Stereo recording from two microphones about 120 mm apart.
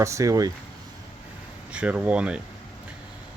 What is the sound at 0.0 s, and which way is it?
Speech, 25° right (ahead or behind).